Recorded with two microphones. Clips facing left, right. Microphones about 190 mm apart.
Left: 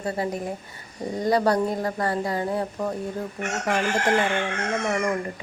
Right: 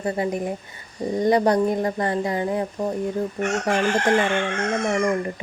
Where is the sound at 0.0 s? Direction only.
20° right (ahead or behind).